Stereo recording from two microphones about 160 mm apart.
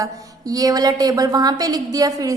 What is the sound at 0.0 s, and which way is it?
A woman's voice, 25° right (ahead or behind).